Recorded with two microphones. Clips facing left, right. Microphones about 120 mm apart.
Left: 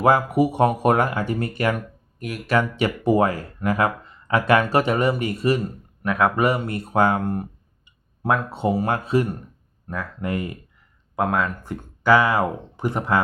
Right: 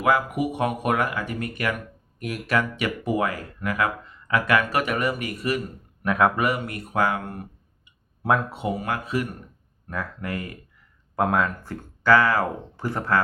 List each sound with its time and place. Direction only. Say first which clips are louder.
0.0 s speech: left 5 dB; 30° left (ahead or behind)
2.2 s speech: left 2 dB; centre (ahead or behind)
2.6 s speech: left 5 dB; 30° left (ahead or behind)
6.1 s speech: even; centre (ahead or behind)
6.3 s speech: left 4 dB; 30° left (ahead or behind)
8.3 s speech: even; centre (ahead or behind)
8.5 s speech: left 5 dB; 30° left (ahead or behind)
9.9 s speech: left 1 dB; centre (ahead or behind)
10.2 s speech: left 5 dB; 20° left (ahead or behind)
11.2 s speech: even; centre (ahead or behind)
11.6 s speech: left 2 dB; 15° left (ahead or behind)